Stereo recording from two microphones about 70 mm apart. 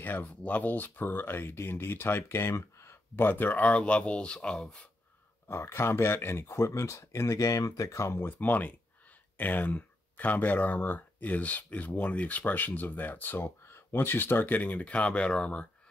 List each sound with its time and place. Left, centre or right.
0.0 s speech: left; by 4.8 s centre
5.5 s speech: left; by 15.6 s centre